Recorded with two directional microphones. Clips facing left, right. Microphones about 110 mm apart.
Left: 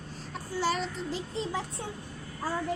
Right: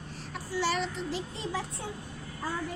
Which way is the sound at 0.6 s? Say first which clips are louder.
Left 1 dB; 40° left (ahead or behind).